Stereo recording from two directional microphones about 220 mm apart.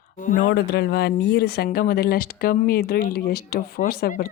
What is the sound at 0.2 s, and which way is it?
Speech, 35° left (ahead or behind).